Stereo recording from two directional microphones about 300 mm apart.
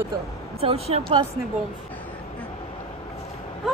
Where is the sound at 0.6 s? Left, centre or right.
Centre.